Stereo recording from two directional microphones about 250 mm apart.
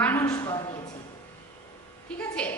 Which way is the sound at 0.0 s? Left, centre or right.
Centre.